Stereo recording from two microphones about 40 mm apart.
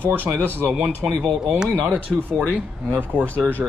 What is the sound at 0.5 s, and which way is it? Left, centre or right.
Speech, right.